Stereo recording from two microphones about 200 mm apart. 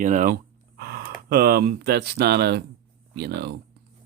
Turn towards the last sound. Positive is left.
turn(degrees=-55)  # may be behind; listen again after turning